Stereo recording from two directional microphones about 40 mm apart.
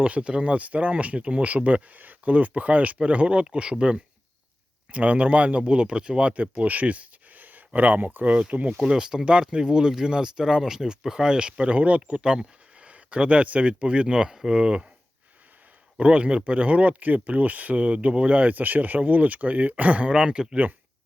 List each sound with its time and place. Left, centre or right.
0.0 s speech: right
6.3 s speech: right
8.3 s speech: right
8.9 s speech: right
14.3 s speech: centre
16.0 s speech: right